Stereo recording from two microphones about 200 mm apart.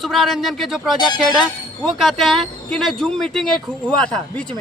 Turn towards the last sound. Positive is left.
turn(degrees=5)  # may be behind; listen again after turning